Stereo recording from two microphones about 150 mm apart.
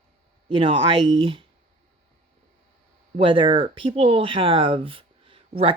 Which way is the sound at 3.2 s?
35° right (ahead or behind).